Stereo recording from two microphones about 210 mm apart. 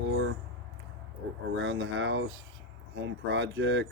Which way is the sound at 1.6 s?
60° right (ahead or behind).